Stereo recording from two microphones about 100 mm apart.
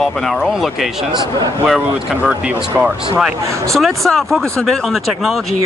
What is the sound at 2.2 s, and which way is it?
Speech, 10° right (ahead or behind).